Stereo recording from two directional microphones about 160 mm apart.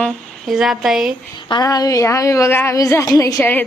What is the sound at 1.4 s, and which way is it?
A woman's voice, 25° left (ahead or behind).